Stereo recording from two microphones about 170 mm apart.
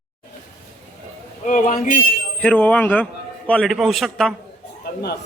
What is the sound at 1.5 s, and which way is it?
Speech, 45° left (ahead or behind).